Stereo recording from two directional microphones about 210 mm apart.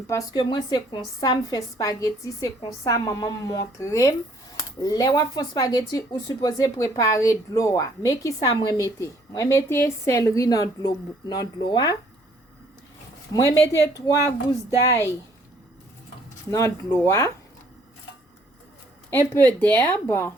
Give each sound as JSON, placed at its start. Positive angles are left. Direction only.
{"t": 0.1, "sound": "speech", "side_deg": 20}
{"t": 13.3, "sound": "speech", "side_deg": 15}
{"t": 16.5, "sound": "speech", "side_deg": 15}
{"t": 19.1, "sound": "speech", "side_deg": 10}